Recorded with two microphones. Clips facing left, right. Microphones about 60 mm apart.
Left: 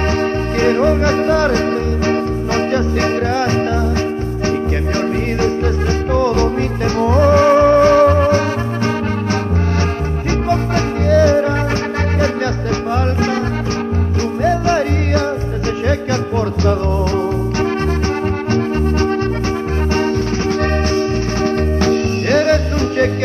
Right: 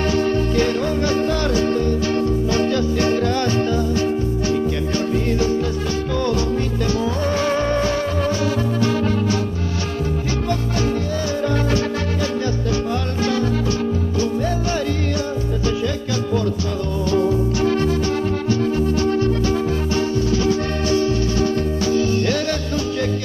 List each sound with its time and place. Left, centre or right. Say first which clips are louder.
0.6 s music: left 5 dB; left
6.1 s music: left 6 dB; left
11.1 s music: left 11 dB; left
16.6 s music: left 6 dB; left
20.9 s music: left 1 dB; left